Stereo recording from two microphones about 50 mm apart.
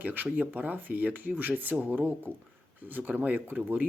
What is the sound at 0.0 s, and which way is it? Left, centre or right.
Speech, right.